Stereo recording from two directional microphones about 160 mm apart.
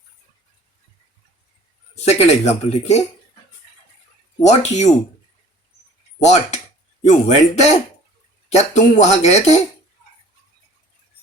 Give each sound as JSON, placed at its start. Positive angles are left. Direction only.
{"t": 2.0, "sound": "speech", "side_deg": 40}
{"t": 4.4, "sound": "speech", "side_deg": 45}
{"t": 6.1, "sound": "speech", "side_deg": 45}